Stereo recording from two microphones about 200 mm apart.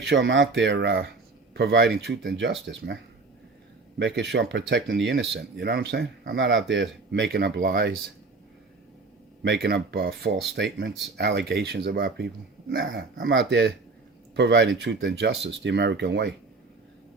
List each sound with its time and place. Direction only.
0.1 s speech: 70° right (ahead or behind); by 7.9 s 45° right (ahead or behind)
9.4 s speech: 55° right (ahead or behind)
13.1 s speech: 65° right (ahead or behind)